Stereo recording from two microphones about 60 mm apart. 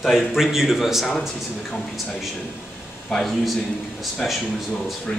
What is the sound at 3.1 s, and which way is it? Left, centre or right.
Speech, centre.